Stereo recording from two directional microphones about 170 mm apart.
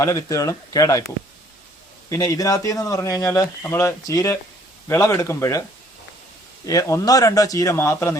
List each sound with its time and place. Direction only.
0.0 s speech: 20° left (ahead or behind)
2.0 s speech: 20° left (ahead or behind)
6.7 s speech: 20° left (ahead or behind)